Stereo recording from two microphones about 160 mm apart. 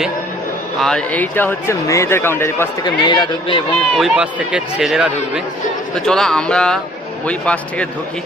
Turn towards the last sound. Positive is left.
turn(degrees=5)  # may be behind; listen again after turning